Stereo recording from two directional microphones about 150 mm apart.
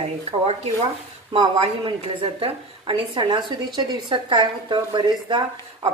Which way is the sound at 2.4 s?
35° right (ahead or behind).